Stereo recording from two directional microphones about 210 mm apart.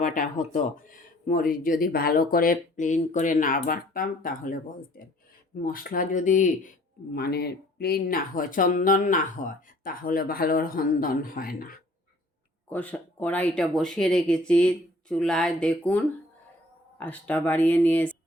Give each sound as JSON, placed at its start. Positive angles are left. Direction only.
{"t": 0.0, "sound": "speech", "side_deg": 40}
{"t": 7.1, "sound": "speech", "side_deg": 50}
{"t": 12.6, "sound": "speech", "side_deg": 10}